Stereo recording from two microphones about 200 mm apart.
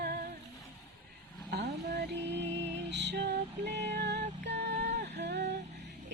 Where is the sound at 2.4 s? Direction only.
60° right (ahead or behind).